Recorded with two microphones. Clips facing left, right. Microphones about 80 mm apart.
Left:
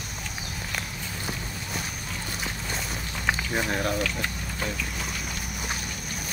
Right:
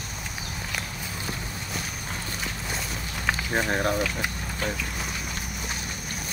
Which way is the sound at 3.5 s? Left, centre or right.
Right.